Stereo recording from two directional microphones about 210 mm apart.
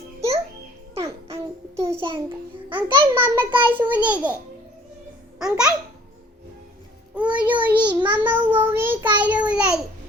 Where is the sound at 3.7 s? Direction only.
10° right (ahead or behind).